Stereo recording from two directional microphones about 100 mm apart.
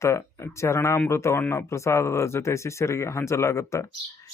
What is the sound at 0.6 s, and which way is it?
A man's voice, 25° left (ahead or behind).